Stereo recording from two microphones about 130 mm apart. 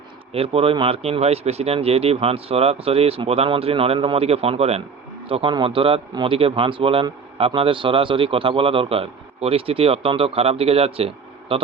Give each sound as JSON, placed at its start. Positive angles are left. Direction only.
{"t": 0.3, "sound": "speech", "side_deg": -45}